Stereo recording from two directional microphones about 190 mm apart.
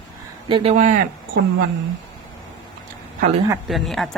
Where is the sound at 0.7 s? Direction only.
40° right (ahead or behind).